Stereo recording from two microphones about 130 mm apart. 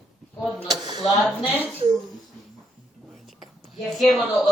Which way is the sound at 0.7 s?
35° right (ahead or behind).